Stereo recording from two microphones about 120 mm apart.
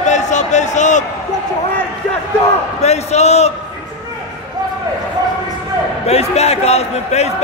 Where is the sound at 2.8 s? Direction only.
65° left (ahead or behind).